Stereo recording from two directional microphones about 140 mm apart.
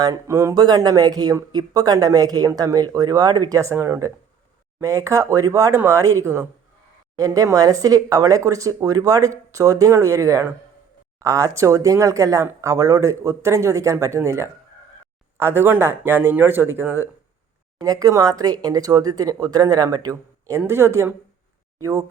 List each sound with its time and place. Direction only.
0.0 s speech: 25° right (ahead or behind)
17.7 s speech: 25° right (ahead or behind)